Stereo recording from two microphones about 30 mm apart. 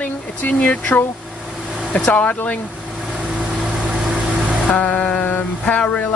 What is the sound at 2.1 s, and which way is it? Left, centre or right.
Speech, left.